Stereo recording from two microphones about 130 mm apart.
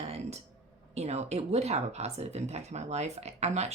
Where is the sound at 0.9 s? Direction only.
55° right (ahead or behind).